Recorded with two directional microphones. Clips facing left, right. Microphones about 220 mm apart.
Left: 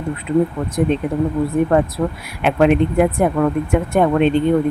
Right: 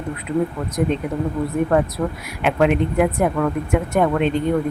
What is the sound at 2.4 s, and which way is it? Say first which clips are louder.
Speech: left 3 dB; 30° left (ahead or behind).